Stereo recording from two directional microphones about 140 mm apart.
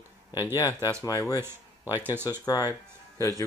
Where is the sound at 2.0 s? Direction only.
15° right (ahead or behind).